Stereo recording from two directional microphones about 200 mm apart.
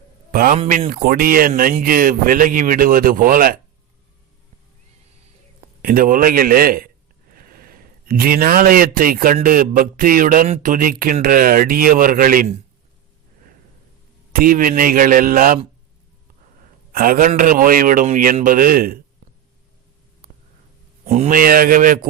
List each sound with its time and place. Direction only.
0.3 s speech: 45° right (ahead or behind)
5.8 s speech: 45° right (ahead or behind)
14.3 s speech: 45° right (ahead or behind)
16.9 s speech: 45° right (ahead or behind)
20.2 s a sound: 45° right (ahead or behind)
21.1 s speech: 40° right (ahead or behind)